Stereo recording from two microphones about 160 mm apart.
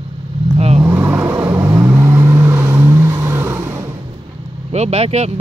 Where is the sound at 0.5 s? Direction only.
40° right (ahead or behind).